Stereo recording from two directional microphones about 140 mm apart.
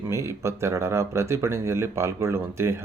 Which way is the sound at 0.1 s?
20° right (ahead or behind).